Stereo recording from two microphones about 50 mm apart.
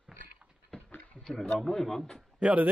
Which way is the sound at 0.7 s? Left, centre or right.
Centre.